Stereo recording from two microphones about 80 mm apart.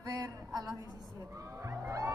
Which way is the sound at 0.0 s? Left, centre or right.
Right.